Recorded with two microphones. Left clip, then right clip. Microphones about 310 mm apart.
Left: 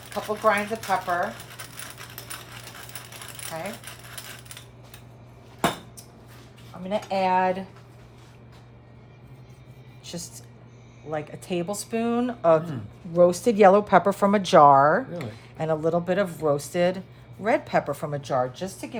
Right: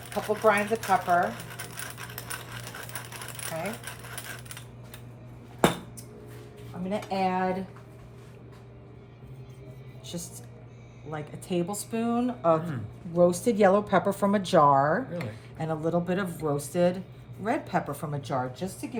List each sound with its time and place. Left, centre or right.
0.1 s coin: centre
6.9 s speech: centre
10.1 s a woman's voice: centre